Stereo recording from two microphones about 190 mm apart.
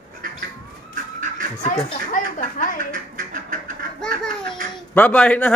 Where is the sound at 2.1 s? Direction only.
45° left (ahead or behind).